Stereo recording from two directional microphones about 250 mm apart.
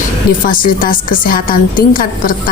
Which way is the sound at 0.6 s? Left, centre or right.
Left.